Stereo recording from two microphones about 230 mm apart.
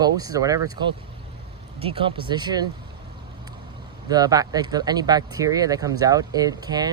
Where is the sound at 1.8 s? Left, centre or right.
Right.